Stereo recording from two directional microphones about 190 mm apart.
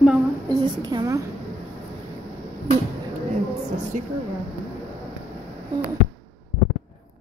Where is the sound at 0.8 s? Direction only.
20° right (ahead or behind).